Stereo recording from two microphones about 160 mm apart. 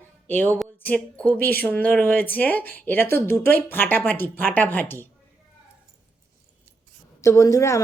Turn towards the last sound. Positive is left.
turn(degrees=20)  # may be behind; listen again after turning